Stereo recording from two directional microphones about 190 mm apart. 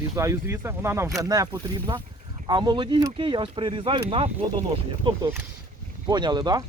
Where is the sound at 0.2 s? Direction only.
15° right (ahead or behind).